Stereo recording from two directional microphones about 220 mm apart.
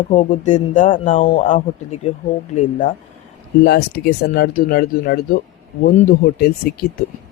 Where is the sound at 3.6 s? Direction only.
50° left (ahead or behind).